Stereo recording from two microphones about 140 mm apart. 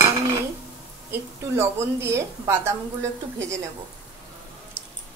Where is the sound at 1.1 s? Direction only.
20° right (ahead or behind).